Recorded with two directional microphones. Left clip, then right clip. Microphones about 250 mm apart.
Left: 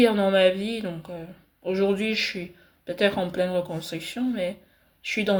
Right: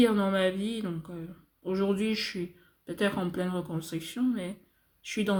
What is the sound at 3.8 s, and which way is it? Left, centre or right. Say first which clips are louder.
Speech: left 5 dB; centre.